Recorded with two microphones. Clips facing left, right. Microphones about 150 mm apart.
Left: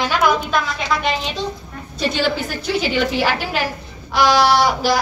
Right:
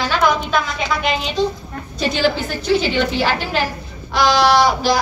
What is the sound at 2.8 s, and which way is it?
A woman's voice, 10° left (ahead or behind).